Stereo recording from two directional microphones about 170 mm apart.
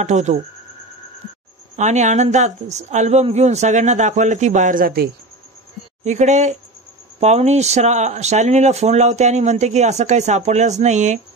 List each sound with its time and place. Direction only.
0.0 s speech: 45° right (ahead or behind)
1.8 s speech: 45° right (ahead or behind); by 5.1 s 60° right (ahead or behind)
6.0 s speech: 45° right (ahead or behind)